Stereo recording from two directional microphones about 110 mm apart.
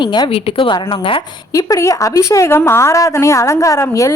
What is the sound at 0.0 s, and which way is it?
Speech, 40° left (ahead or behind).